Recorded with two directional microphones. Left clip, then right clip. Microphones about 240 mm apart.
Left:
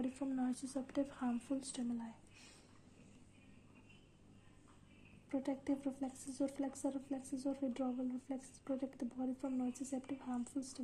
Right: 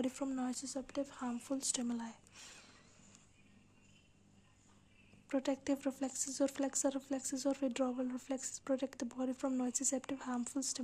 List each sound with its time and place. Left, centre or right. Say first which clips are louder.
0.0 s speech: right 2 dB; right
5.3 s speech: right 4 dB; right